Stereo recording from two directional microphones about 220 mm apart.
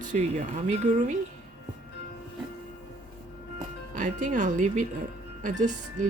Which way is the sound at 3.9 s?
35° right (ahead or behind).